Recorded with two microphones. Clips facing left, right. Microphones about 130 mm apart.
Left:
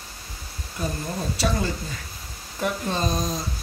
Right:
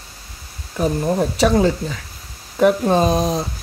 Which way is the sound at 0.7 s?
70° right (ahead or behind).